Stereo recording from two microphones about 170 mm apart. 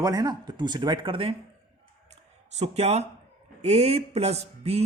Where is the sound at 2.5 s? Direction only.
40° right (ahead or behind).